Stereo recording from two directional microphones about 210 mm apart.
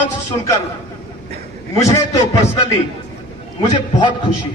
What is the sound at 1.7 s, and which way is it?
Speech, 15° left (ahead or behind).